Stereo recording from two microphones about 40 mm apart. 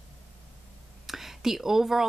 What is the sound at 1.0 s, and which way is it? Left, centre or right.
Speech, centre.